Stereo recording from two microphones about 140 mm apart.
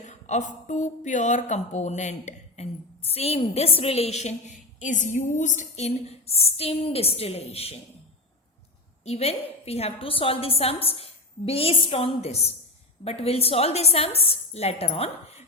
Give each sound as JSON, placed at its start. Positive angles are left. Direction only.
{"t": 0.0, "sound": "speech", "side_deg": 60}
{"t": 9.0, "sound": "speech", "side_deg": 50}